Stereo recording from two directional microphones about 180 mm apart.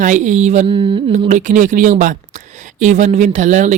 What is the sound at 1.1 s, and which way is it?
Speech, 40° right (ahead or behind).